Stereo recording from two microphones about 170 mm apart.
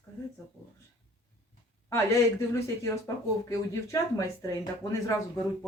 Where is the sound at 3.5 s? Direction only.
20° left (ahead or behind).